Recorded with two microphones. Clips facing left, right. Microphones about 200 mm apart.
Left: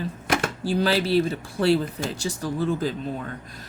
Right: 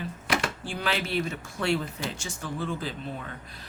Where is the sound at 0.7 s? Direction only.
35° left (ahead or behind).